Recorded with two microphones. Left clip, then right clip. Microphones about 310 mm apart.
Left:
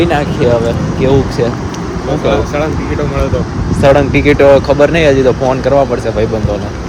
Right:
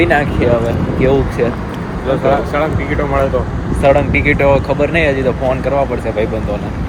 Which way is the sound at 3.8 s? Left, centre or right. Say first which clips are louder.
Left 3 dB; centre.